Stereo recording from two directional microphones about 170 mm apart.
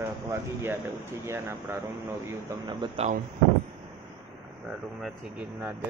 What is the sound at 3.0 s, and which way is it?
Speech, 35° right (ahead or behind).